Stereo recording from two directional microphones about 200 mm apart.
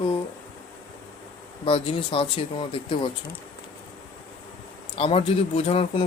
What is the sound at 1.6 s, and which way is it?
Speech, 25° left (ahead or behind).